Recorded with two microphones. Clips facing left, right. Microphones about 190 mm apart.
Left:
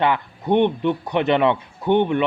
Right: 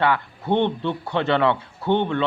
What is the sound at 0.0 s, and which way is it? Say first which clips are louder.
Speech: left 1 dB; 20° left (ahead or behind).